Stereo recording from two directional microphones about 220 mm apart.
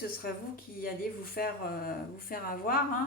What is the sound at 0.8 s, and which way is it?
Speech, 40° left (ahead or behind).